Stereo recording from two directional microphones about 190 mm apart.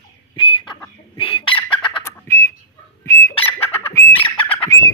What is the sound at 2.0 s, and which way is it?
Whistling, 15° left (ahead or behind).